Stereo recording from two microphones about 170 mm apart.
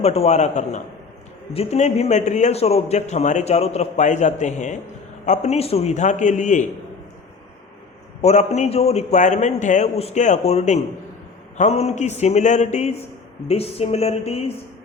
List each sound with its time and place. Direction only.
0.0 s a man's voice: 40° left (ahead or behind)
8.2 s a man's voice: 40° left (ahead or behind)